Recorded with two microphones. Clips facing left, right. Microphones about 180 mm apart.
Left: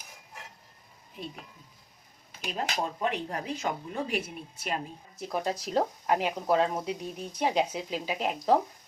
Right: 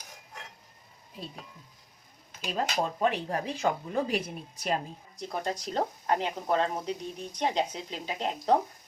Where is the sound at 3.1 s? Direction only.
30° right (ahead or behind).